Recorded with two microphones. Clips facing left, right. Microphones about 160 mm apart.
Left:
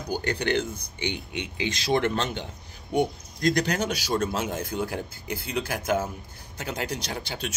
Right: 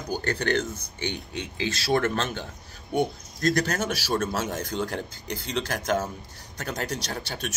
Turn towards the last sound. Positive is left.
turn(degrees=15)  # may be behind; listen again after turning